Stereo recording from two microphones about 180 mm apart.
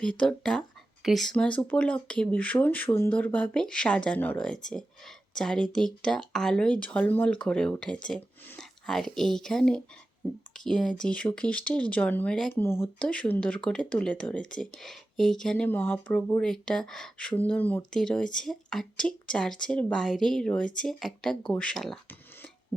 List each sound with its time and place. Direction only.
0.0 s speech: 5° left (ahead or behind)